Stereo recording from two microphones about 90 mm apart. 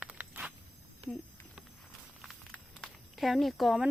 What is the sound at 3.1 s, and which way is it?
Speech, centre (ahead or behind).